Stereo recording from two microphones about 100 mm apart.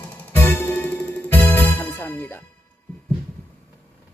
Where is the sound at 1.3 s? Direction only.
20° left (ahead or behind).